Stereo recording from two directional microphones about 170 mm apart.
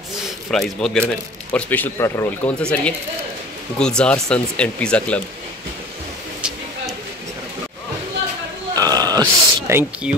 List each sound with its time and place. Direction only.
0.1 s speech: centre (ahead or behind)
8.7 s grunt: 20° right (ahead or behind)
9.7 s speech: 15° right (ahead or behind)